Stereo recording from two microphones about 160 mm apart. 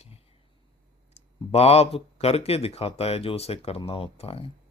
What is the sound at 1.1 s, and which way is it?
Speech, 40° left (ahead or behind).